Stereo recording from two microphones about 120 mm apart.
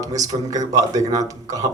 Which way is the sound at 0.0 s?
30° right (ahead or behind).